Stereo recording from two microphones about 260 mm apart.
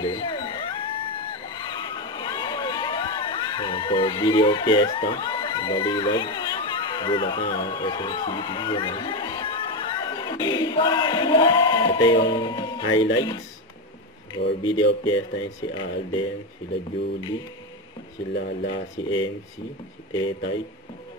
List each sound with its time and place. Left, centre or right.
0.0 s crowd: centre
13.0 s speech: centre
18.7 s speech: centre